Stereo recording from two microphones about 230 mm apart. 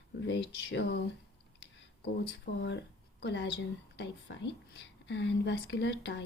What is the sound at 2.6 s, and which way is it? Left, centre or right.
Speech, left.